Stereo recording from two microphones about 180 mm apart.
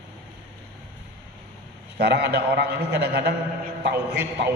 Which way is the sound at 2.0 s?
65° right (ahead or behind).